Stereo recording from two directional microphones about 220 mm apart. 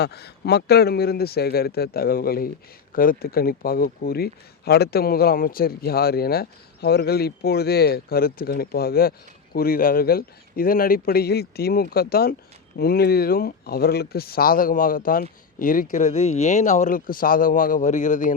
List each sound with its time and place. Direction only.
0.0 s speech: 45° left (ahead or behind)